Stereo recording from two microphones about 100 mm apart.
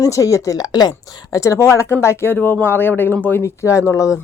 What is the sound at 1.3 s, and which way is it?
Speech, 30° left (ahead or behind).